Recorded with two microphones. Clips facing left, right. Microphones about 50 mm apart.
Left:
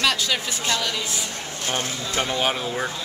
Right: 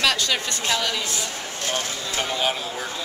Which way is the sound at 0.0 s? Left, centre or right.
Centre.